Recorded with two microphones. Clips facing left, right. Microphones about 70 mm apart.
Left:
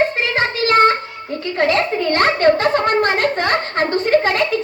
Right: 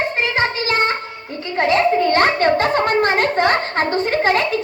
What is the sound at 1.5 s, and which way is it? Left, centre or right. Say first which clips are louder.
Speech: right 2 dB; right.